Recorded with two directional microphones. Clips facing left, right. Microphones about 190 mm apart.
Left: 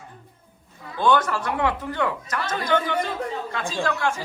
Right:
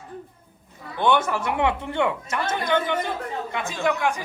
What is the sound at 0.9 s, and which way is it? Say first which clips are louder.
A woman's voice: even; 20° right (ahead or behind).